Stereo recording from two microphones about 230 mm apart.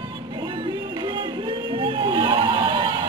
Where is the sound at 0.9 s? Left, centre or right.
Centre.